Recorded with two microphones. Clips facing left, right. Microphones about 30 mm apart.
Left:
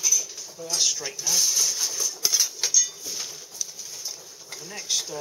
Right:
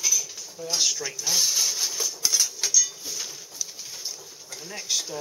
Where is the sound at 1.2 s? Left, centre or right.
Centre.